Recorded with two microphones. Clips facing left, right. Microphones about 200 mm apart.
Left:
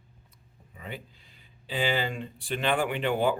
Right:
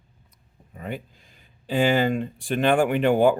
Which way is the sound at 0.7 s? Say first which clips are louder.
Right 7 dB; 45° right (ahead or behind).